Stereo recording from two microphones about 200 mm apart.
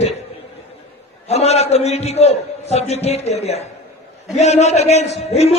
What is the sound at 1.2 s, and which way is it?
A man's voice, 30° left (ahead or behind).